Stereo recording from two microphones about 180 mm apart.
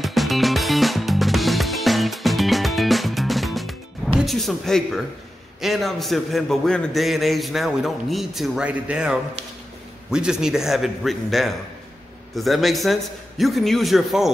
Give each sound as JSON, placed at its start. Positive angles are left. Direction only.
{"t": 0.0, "sound": "music", "side_deg": 0}
{"t": 4.2, "sound": "a man's voice", "side_deg": 0}